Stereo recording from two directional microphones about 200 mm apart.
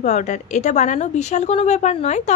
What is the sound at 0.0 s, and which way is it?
A woman's voice, 35° left (ahead or behind).